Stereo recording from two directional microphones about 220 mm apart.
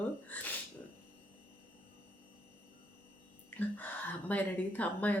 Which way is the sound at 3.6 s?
5° left (ahead or behind).